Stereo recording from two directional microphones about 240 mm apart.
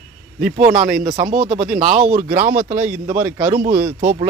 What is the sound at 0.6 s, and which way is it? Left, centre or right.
Speech, right.